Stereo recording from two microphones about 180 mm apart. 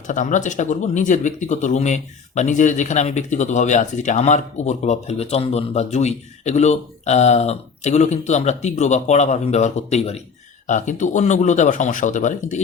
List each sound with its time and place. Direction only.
0.1 s speech: 45° left (ahead or behind)